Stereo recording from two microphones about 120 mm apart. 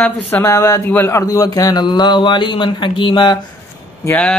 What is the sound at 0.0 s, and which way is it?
A man's voice, 20° left (ahead or behind).